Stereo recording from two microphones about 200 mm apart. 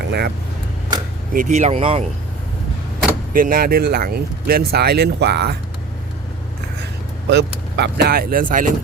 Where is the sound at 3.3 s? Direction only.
45° right (ahead or behind).